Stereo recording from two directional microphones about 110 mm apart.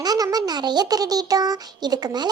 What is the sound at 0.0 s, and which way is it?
A child's voice, 35° right (ahead or behind).